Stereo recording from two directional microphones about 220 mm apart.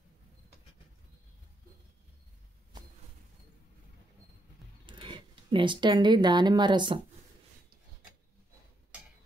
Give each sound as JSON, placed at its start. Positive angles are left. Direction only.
{"t": 4.8, "sound": "speech", "side_deg": -20}